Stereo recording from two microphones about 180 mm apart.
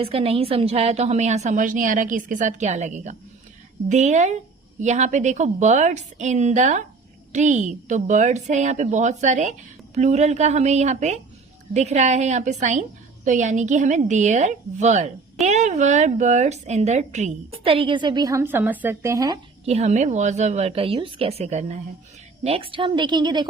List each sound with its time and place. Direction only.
0.0 s a woman's voice: 35° right (ahead or behind)
19.6 s a woman's voice: 35° right (ahead or behind)